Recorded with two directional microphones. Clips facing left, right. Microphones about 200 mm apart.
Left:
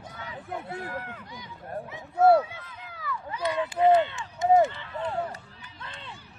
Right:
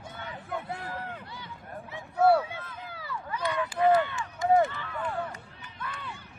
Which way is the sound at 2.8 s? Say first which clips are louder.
Left 2 dB; 30° right (ahead or behind).